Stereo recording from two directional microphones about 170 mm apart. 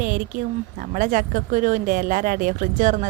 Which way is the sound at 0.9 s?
55° right (ahead or behind).